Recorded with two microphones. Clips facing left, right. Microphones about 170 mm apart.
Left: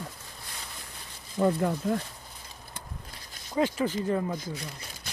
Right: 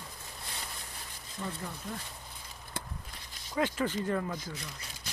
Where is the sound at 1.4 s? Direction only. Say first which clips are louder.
Left 14 dB; 65° left (ahead or behind).